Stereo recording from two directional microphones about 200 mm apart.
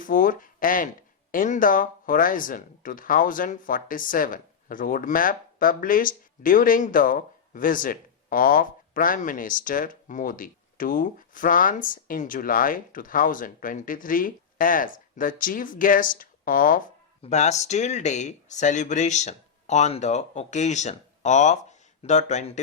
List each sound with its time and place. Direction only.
0.0 s speech: 45° left (ahead or behind)